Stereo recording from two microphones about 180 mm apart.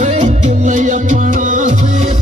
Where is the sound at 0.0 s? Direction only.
40° right (ahead or behind).